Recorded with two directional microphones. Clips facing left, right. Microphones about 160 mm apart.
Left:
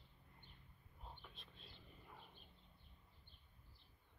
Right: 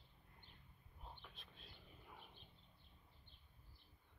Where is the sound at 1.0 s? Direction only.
Centre (ahead or behind).